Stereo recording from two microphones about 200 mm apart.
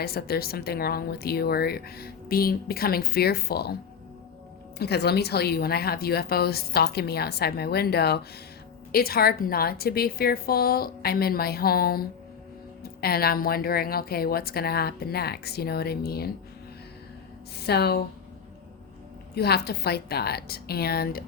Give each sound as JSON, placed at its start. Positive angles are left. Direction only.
{"t": 0.0, "sound": "speech", "side_deg": 50}
{"t": 4.8, "sound": "speech", "side_deg": 55}
{"t": 17.6, "sound": "speech", "side_deg": 55}
{"t": 19.3, "sound": "speech", "side_deg": 55}